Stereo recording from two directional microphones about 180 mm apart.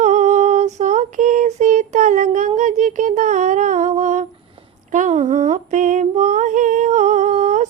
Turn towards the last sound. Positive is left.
turn(degrees=-40)  # may be behind; listen again after turning